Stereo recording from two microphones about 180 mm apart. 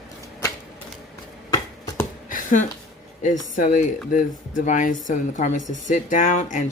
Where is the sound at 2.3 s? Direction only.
45° left (ahead or behind).